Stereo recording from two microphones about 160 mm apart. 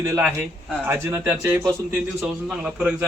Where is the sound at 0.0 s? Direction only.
15° right (ahead or behind).